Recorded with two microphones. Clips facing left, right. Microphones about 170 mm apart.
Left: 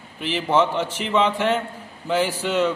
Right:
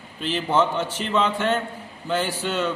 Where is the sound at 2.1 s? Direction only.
10° left (ahead or behind).